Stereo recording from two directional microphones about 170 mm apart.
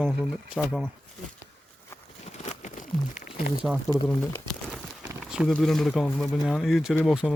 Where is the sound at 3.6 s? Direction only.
5° right (ahead or behind).